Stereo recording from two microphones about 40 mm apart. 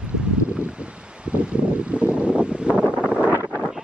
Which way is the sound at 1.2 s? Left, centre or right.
Right.